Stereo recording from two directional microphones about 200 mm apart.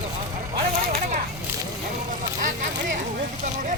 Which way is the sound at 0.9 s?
40° right (ahead or behind).